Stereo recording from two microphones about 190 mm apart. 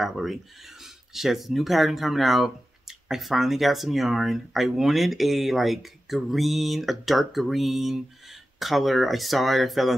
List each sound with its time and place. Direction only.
0.0 s speech: centre (ahead or behind)